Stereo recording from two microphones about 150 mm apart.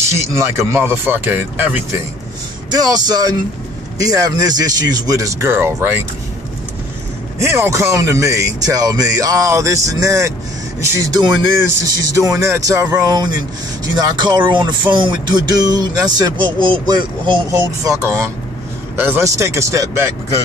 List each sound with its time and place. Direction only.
0.0 s speech: 20° right (ahead or behind)
2.7 s speech: 25° right (ahead or behind)
7.3 s speech: 15° right (ahead or behind)
13.0 s speech: 25° right (ahead or behind)